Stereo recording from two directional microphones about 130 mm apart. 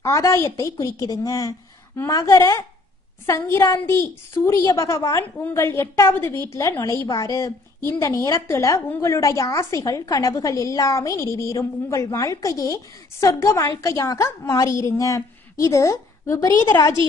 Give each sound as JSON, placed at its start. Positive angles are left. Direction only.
{"t": 0.0, "sound": "a woman's voice", "side_deg": 25}